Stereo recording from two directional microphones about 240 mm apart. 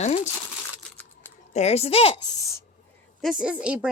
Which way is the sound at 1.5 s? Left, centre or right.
Left.